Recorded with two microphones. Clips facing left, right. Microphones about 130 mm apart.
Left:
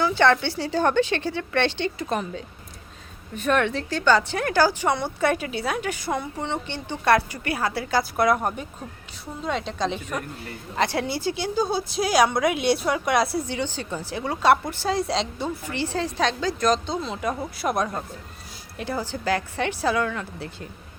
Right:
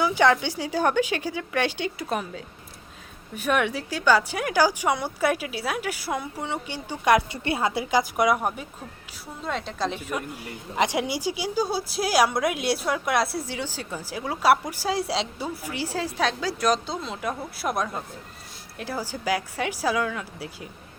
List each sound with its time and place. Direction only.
0.0 s speech: 10° right (ahead or behind)
7.4 s a woman's voice: 25° right (ahead or behind); by 20.7 s 5° right (ahead or behind)